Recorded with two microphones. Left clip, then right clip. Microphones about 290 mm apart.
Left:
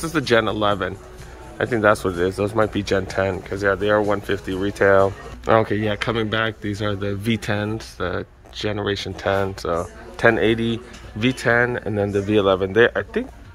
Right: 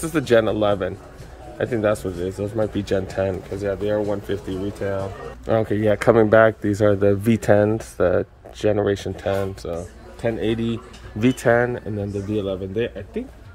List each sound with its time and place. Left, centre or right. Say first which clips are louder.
0.0 s speech: right 1 dB; centre